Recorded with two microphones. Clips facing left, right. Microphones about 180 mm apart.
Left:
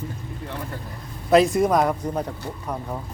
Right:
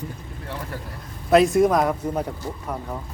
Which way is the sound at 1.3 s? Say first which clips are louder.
Right 1 dB; centre (ahead or behind).